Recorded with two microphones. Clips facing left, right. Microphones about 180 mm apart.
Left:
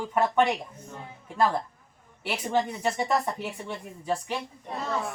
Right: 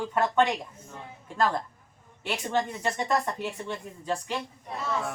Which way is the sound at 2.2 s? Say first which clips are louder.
Left 1 dB; 10° left (ahead or behind).